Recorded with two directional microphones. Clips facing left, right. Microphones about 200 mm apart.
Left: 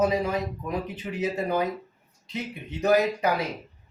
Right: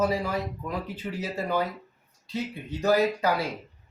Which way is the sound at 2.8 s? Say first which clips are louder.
Left 1 dB; 20° left (ahead or behind).